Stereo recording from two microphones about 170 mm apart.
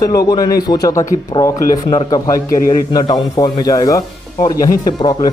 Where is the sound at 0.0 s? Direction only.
20° left (ahead or behind).